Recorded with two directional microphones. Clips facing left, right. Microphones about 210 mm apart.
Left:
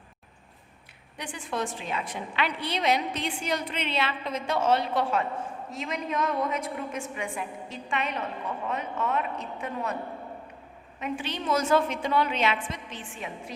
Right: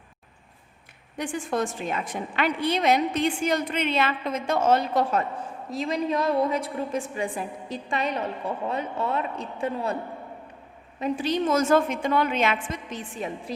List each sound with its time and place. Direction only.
1.1 s a woman's voice: 45° right (ahead or behind); by 10.0 s 30° right (ahead or behind)
11.0 s a woman's voice: 40° right (ahead or behind)